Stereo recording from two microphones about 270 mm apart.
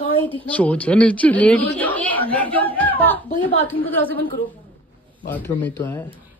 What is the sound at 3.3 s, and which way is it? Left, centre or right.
Speech, left.